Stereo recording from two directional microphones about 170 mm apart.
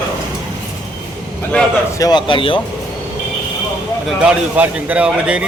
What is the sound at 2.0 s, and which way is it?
Speech, 25° left (ahead or behind).